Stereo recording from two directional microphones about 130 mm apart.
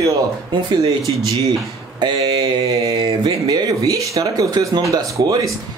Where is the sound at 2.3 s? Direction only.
50° right (ahead or behind).